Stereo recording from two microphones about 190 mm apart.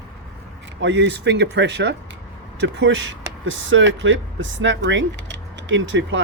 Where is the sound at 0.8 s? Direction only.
70° right (ahead or behind).